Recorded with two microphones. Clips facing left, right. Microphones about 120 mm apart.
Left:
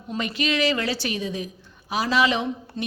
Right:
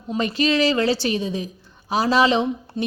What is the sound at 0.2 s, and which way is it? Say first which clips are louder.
A woman's voice: right 5 dB; 35° right (ahead or behind).